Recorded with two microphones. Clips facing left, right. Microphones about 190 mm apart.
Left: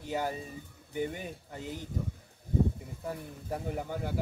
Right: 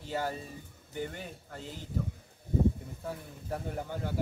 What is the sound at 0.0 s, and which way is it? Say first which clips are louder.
Speech: left 1 dB; 15° left (ahead or behind).